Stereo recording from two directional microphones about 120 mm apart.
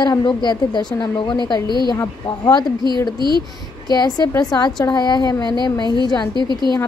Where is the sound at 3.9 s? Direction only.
35° left (ahead or behind).